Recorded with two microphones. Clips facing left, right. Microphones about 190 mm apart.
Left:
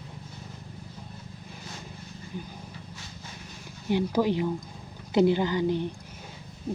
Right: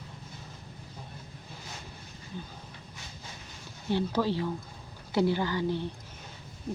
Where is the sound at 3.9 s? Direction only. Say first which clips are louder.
Left 3 dB; 15° left (ahead or behind).